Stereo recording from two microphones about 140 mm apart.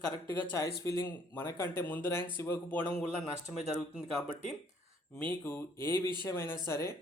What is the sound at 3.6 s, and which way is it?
Speech, centre (ahead or behind).